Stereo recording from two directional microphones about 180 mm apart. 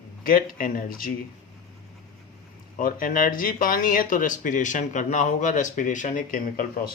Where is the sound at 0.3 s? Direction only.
50° left (ahead or behind).